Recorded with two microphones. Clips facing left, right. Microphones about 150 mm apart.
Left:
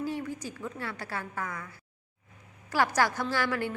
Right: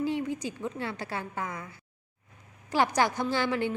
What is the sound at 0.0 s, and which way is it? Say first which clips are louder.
A woman's voice: right 4 dB; 20° right (ahead or behind).